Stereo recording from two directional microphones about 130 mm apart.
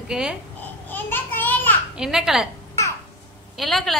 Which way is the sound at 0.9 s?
15° left (ahead or behind).